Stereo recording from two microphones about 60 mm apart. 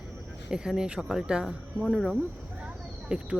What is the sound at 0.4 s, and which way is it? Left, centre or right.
Speech, centre.